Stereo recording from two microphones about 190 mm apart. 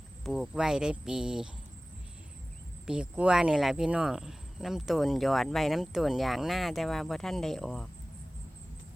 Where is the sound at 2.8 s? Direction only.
5° right (ahead or behind).